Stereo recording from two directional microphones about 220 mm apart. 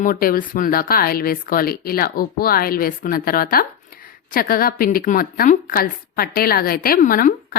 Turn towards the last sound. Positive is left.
turn(degrees=40)  # may be behind; listen again after turning